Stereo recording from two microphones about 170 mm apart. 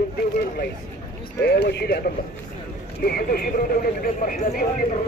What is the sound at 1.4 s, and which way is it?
Speech, 75° left (ahead or behind).